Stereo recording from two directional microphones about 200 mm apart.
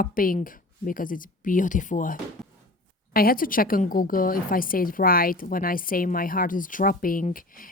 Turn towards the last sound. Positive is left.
turn(degrees=45)  # may be behind; listen again after turning